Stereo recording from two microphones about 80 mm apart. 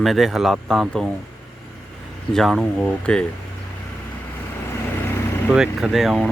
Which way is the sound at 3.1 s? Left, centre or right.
Centre.